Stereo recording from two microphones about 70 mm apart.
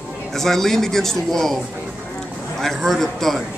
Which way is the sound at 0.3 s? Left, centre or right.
Centre.